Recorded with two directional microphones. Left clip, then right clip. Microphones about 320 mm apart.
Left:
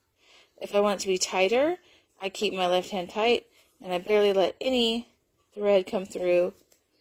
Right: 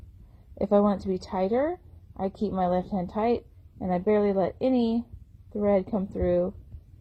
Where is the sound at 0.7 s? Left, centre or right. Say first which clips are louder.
Even; left.